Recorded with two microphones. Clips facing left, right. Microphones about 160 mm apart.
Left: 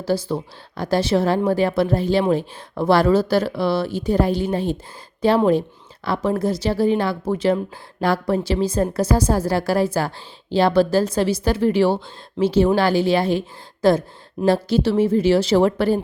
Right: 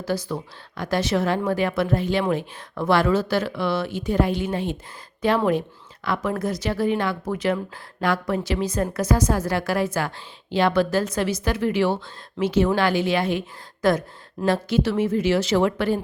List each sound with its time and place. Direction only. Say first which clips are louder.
0.0 s a woman's voice: left 4 dB; 30° left (ahead or behind)